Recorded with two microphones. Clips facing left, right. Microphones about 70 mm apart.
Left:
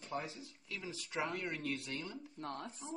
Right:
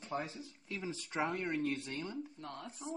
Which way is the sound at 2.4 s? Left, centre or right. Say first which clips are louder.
Left 2 dB; left.